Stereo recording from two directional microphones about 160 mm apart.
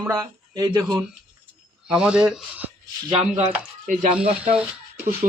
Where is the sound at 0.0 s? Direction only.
15° right (ahead or behind).